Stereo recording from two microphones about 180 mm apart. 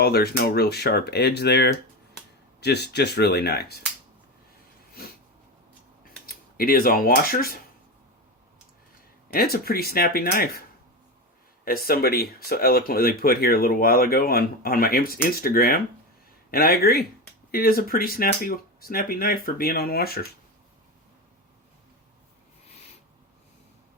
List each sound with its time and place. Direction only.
0.0 s speech: 60° left (ahead or behind)
6.2 s speech: 55° left (ahead or behind)
9.3 s speech: 55° left (ahead or behind)
11.6 s speech: 55° left (ahead or behind)